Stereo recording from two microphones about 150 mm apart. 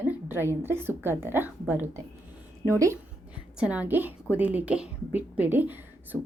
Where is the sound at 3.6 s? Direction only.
10° right (ahead or behind).